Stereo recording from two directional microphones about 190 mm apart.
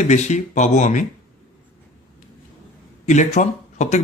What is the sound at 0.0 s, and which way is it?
Speech, 40° left (ahead or behind).